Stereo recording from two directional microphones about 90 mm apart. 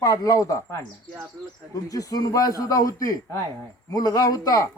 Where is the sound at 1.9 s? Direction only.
40° left (ahead or behind).